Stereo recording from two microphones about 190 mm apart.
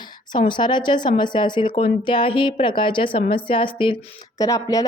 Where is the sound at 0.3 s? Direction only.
25° left (ahead or behind).